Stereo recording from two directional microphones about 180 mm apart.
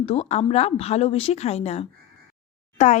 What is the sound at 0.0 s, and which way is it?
Speech, 35° left (ahead or behind).